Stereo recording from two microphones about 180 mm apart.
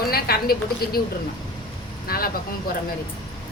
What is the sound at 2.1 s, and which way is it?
Speech, 55° left (ahead or behind).